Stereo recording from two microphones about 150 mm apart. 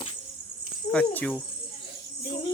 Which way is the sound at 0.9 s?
10° left (ahead or behind).